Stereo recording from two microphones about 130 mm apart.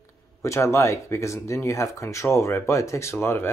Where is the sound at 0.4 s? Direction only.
20° left (ahead or behind).